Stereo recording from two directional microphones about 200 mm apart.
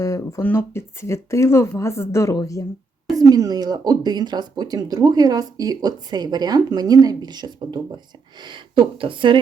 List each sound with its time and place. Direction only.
0.0 s speech: 15° left (ahead or behind)
3.2 s speech: 20° right (ahead or behind)